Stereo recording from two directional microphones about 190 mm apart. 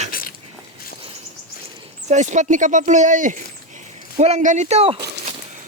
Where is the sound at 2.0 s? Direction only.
40° right (ahead or behind).